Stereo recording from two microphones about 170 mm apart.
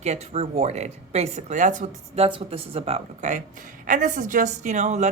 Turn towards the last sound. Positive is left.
turn(degrees=-45)  # may be behind; listen again after turning